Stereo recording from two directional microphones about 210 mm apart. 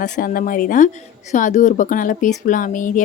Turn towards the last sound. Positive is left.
turn(degrees=40)  # may be behind; listen again after turning